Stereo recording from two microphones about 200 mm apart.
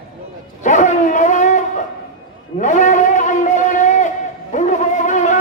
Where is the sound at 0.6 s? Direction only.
35° left (ahead or behind).